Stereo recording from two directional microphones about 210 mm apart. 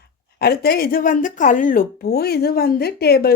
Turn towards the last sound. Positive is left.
turn(degrees=50)  # may be behind; listen again after turning